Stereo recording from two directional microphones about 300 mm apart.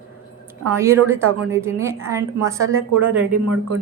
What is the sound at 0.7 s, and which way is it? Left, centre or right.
Speech, centre.